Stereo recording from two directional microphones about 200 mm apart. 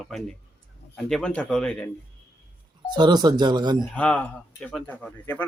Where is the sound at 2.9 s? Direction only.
20° right (ahead or behind).